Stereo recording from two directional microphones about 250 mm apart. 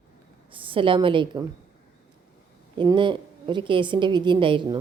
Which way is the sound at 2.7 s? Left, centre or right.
Centre.